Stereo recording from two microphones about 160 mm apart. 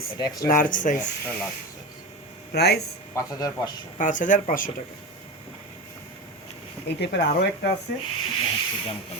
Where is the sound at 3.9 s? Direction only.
50° left (ahead or behind).